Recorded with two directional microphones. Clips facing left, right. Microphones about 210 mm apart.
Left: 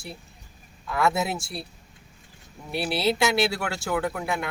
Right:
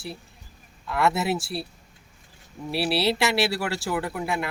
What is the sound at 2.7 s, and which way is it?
Speech, centre (ahead or behind).